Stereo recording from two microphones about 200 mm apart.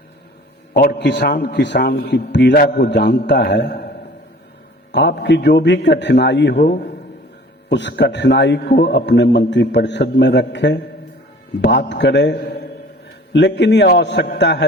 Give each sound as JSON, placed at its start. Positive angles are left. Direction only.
{"t": 0.7, "sound": "a man's voice", "side_deg": 50}
{"t": 4.9, "sound": "a man's voice", "side_deg": 60}